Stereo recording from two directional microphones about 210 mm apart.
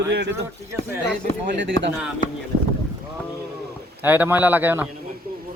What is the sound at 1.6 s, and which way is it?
Speech, 55° right (ahead or behind).